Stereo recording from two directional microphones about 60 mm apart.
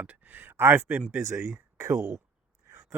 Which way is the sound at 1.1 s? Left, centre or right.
Right.